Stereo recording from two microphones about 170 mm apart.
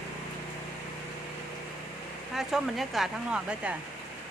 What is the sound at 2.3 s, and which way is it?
Speech, centre (ahead or behind).